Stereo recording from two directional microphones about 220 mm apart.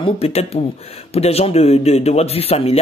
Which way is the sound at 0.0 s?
25° left (ahead or behind).